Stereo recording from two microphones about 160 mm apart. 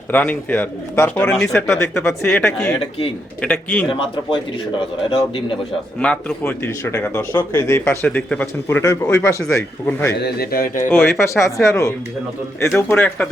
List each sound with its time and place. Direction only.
0.1 s speech: 10° left (ahead or behind)
3.8 s speech: 30° left (ahead or behind)
6.0 s speech: 5° left (ahead or behind)
10.2 s speech: 85° left; by 10.8 s 70° left (ahead or behind)
10.8 s speech: 15° left (ahead or behind)